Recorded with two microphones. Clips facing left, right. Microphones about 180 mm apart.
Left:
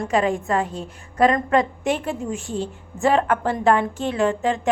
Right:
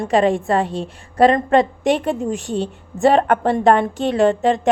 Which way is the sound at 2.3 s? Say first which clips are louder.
Right 4 dB; 70° right (ahead or behind).